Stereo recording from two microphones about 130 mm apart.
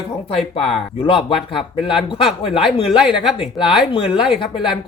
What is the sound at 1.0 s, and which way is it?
Speech, 40° left (ahead or behind).